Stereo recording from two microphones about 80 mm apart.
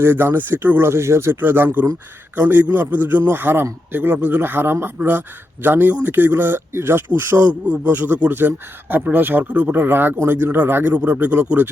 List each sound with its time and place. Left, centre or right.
0.0 s speech: right